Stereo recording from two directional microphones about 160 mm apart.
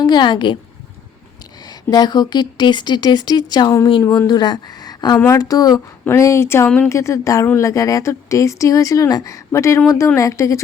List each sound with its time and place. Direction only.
0.0 s speech: 30° left (ahead or behind)
1.9 s speech: 25° left (ahead or behind)